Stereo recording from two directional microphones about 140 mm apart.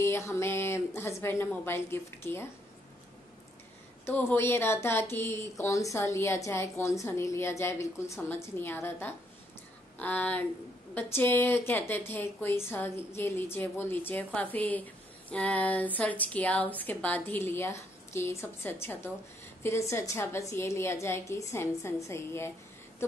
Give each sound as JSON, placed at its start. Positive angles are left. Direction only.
{"t": 0.0, "sound": "speech", "side_deg": 20}
{"t": 4.0, "sound": "a woman's voice", "side_deg": 15}